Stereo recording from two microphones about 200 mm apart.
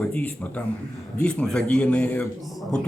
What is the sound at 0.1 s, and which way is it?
A man's voice, 5° left (ahead or behind).